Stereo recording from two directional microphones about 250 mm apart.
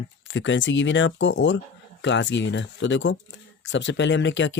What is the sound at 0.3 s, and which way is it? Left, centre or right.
Speech, left.